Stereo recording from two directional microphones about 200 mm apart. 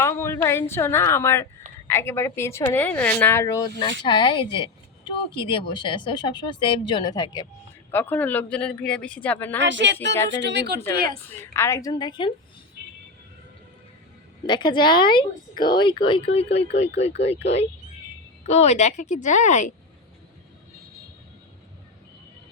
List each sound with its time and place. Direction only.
0.0 s a woman's voice: 15° left (ahead or behind)
7.9 s a woman's voice: 10° left (ahead or behind)
9.6 s speech: 65° right (ahead or behind); by 11.2 s 50° right (ahead or behind)
11.3 s a woman's voice: 15° left (ahead or behind)
14.4 s a woman's voice: 20° left (ahead or behind)
18.4 s speech: 35° left (ahead or behind)